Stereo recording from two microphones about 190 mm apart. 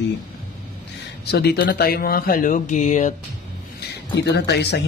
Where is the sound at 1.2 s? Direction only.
60° left (ahead or behind); by 3.2 s 40° left (ahead or behind).